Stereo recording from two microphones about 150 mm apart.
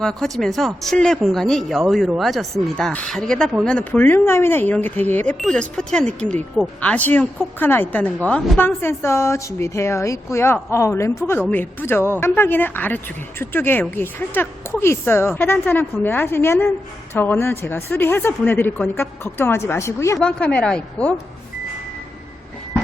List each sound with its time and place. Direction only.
0.0 s a woman's voice: 5° left (ahead or behind)
20.1 s a woman's voice: 10° left (ahead or behind)